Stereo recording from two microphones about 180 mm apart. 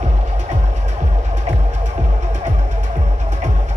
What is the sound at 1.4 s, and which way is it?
Music, 40° right (ahead or behind).